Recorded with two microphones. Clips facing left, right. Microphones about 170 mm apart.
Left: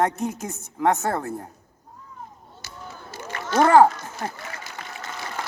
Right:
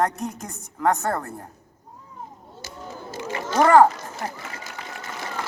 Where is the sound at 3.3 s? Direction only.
15° right (ahead or behind).